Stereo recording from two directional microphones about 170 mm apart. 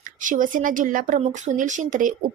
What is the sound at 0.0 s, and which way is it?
A woman's voice, 50° right (ahead or behind).